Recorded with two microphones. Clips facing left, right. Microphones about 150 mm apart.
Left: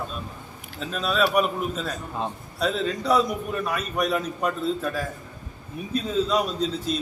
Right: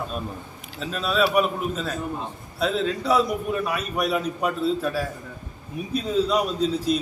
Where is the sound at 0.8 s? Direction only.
Centre (ahead or behind).